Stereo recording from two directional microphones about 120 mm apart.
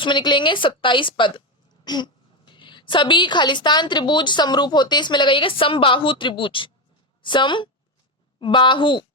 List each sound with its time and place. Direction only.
0.0 s a woman's voice: 40° left (ahead or behind)